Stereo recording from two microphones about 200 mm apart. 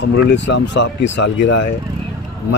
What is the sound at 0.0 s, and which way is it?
Speech, 60° left (ahead or behind).